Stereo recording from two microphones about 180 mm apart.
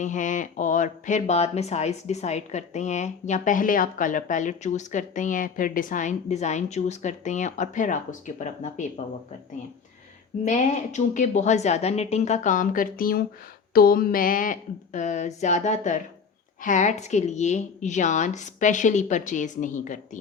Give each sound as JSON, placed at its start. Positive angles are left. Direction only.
{"t": 0.0, "sound": "speech", "side_deg": 45}
{"t": 10.4, "sound": "a woman's voice", "side_deg": 40}